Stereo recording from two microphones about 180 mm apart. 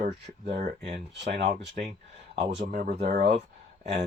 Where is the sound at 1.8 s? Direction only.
50° right (ahead or behind).